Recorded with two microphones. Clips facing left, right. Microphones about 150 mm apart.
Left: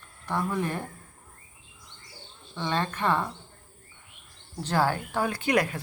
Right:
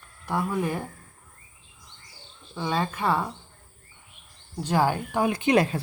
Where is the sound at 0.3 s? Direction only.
10° right (ahead or behind).